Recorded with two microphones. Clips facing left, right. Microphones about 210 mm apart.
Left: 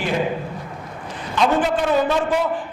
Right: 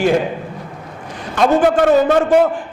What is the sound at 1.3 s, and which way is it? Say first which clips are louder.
A man's voice: right 6 dB; 50° right (ahead or behind).